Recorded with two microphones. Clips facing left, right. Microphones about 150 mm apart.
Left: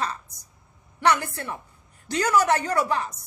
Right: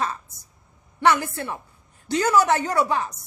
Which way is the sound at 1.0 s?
25° right (ahead or behind).